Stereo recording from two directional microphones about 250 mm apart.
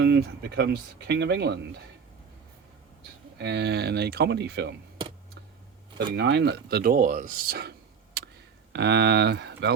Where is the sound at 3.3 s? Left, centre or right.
Right.